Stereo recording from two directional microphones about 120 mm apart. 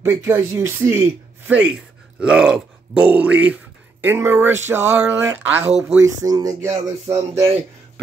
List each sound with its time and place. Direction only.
0.0 s speech: 20° right (ahead or behind)